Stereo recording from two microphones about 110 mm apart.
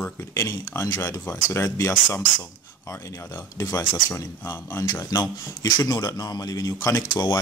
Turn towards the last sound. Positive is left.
turn(degrees=35)  # may be behind; listen again after turning